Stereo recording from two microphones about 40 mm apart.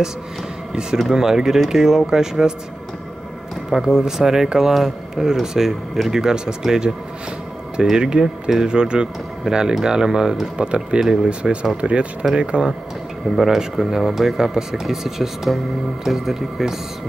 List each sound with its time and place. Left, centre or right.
1.1 s speech: centre
3.8 s speech: centre
11.7 s speech: right
13.4 s speech: centre